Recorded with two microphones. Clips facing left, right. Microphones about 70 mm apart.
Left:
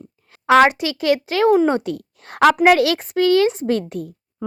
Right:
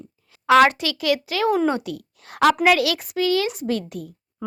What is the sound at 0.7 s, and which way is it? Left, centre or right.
Speech, left.